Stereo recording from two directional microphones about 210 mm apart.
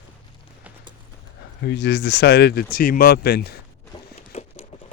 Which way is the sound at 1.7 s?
55° left (ahead or behind).